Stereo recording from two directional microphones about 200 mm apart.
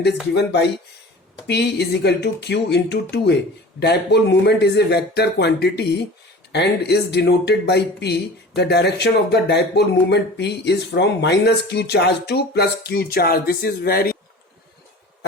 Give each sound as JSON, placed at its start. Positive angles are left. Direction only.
{"t": 0.0, "sound": "speech", "side_deg": 55}